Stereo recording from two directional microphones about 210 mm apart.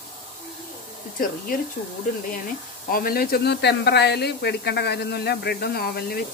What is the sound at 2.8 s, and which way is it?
Speech, 45° left (ahead or behind).